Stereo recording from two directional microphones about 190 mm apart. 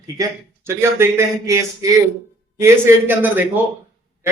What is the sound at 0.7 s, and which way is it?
A man's voice, 15° right (ahead or behind).